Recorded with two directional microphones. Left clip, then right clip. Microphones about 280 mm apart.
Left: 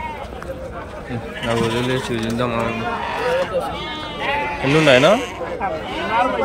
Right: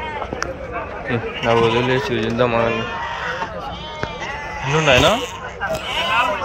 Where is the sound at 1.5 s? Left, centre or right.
Centre.